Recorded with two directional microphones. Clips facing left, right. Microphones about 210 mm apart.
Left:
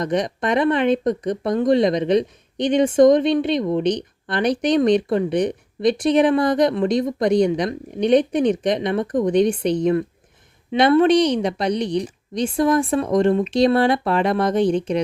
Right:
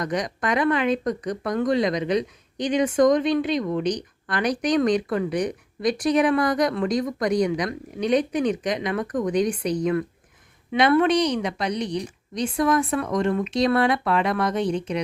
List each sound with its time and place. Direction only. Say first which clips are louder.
0.0 s speech: left 4 dB; 25° left (ahead or behind)